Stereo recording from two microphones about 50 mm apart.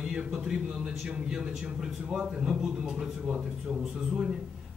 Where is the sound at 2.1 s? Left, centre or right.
Centre.